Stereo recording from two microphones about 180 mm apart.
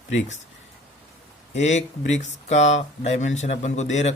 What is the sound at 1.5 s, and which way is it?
Speech, 40° left (ahead or behind).